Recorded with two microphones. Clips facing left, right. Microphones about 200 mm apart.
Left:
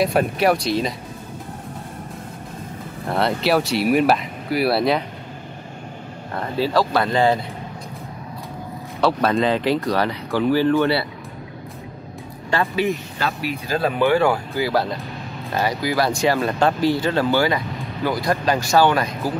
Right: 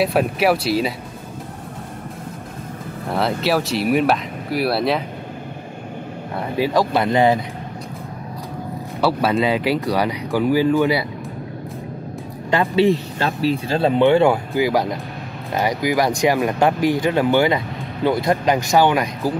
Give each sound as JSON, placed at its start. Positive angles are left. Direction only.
{"t": 0.0, "sound": "speech", "side_deg": 0}
{"t": 3.1, "sound": "speech", "side_deg": 0}
{"t": 6.3, "sound": "speech", "side_deg": -10}
{"t": 9.0, "sound": "speech", "side_deg": -10}
{"t": 12.4, "sound": "speech", "side_deg": -25}